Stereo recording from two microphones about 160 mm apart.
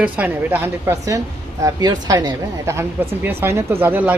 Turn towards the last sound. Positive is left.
turn(degrees=-10)  # may be behind; listen again after turning